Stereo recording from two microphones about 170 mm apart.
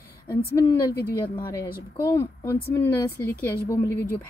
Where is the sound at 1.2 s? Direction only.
25° left (ahead or behind).